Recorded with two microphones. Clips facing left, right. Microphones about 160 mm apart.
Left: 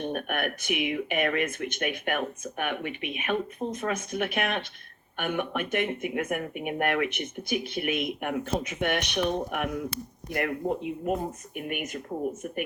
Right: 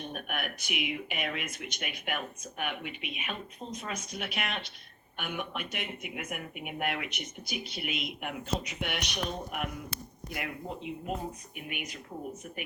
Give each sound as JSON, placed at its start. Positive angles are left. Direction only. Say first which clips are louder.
{"t": 0.1, "sound": "speech", "louder": "left 7 dB", "side_deg": 55}